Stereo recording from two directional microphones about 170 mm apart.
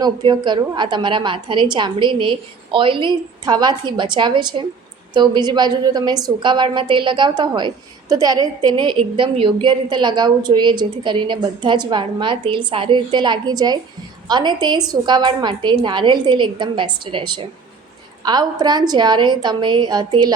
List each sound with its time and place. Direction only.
0.0 s a woman's voice: 25° right (ahead or behind)